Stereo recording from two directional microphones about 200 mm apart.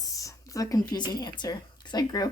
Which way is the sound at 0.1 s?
15° left (ahead or behind).